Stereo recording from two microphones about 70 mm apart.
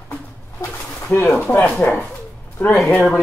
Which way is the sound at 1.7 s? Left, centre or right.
Left.